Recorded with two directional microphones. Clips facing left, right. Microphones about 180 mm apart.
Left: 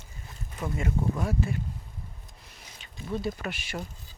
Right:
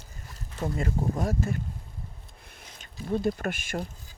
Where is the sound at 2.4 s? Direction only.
55° right (ahead or behind).